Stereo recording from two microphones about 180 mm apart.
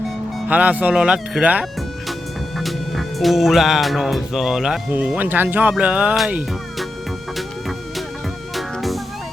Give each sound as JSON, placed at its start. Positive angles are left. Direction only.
{"t": 0.3, "sound": "speech", "side_deg": -10}
{"t": 8.5, "sound": "music", "side_deg": 0}